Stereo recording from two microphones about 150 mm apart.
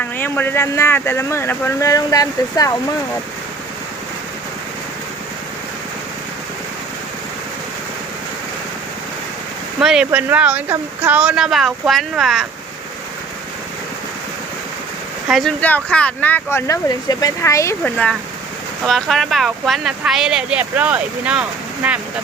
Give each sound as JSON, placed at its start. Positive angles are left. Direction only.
{"t": 0.0, "sound": "speech", "side_deg": 15}
{"t": 9.8, "sound": "speech", "side_deg": -5}
{"t": 15.3, "sound": "speech", "side_deg": 0}
{"t": 17.9, "sound": "speech", "side_deg": 5}